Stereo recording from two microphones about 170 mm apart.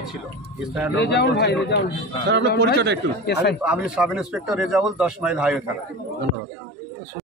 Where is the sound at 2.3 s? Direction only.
85° right.